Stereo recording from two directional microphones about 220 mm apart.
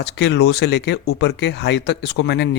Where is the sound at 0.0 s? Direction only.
50° left (ahead or behind).